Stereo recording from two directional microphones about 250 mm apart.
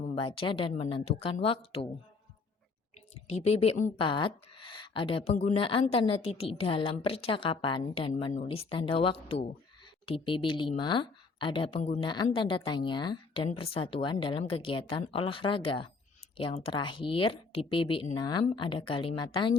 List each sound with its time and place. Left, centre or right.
0.2 s a woman's voice: left
3.2 s a woman's voice: left